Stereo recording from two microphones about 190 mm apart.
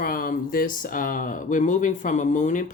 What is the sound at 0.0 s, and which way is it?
Speech, 50° left (ahead or behind).